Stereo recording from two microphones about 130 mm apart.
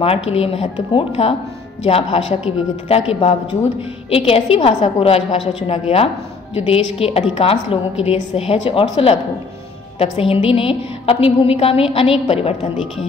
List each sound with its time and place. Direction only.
0.0 s a woman's voice: 50° left (ahead or behind)